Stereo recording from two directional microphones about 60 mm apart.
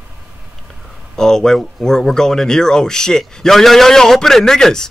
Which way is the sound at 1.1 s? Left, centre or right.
Centre.